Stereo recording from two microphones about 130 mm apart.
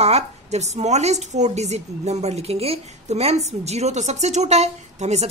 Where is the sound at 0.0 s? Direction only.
55° right (ahead or behind).